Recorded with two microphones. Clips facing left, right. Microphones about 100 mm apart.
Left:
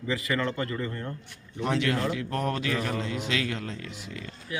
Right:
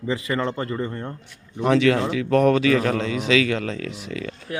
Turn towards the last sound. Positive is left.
turn(degrees=-90)